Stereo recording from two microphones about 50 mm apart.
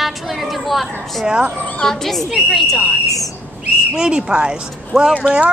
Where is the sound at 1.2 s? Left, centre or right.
Centre.